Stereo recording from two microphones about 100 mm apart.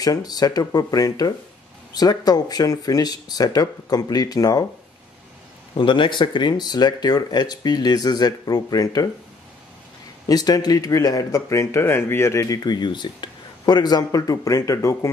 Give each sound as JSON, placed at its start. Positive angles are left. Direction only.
{"t": 0.0, "sound": "speech", "side_deg": 40}
{"t": 5.8, "sound": "speech", "side_deg": 55}
{"t": 10.2, "sound": "speech", "side_deg": 40}